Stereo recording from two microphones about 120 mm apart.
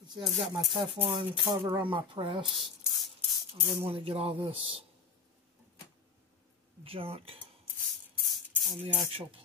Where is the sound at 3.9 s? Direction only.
55° right (ahead or behind).